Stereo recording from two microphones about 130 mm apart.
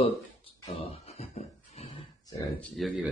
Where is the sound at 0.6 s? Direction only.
50° left (ahead or behind).